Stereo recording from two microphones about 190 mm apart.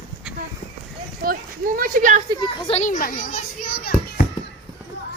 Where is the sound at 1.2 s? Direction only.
50° right (ahead or behind).